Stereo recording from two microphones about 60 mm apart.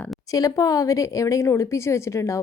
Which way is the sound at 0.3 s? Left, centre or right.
Left.